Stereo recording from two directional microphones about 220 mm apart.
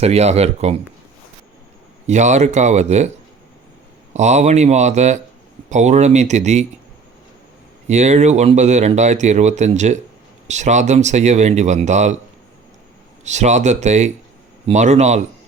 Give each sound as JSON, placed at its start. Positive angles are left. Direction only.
{"t": 0.0, "sound": "speech", "side_deg": -30}
{"t": 2.0, "sound": "speech", "side_deg": -30}
{"t": 4.1, "sound": "speech", "side_deg": -30}
{"t": 7.9, "sound": "speech", "side_deg": -30}
{"t": 13.2, "sound": "speech", "side_deg": -30}